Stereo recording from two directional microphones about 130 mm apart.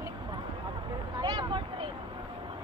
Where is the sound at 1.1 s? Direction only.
35° right (ahead or behind).